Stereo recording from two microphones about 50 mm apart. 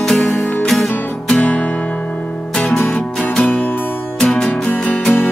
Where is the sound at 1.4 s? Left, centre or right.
Left.